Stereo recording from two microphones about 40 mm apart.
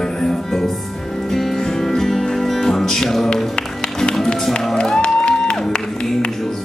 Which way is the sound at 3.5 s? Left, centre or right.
Centre.